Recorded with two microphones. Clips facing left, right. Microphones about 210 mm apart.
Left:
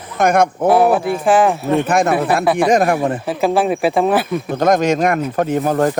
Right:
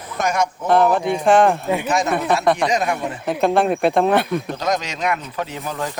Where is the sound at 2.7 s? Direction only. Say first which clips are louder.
Left 7 dB; 50° left (ahead or behind).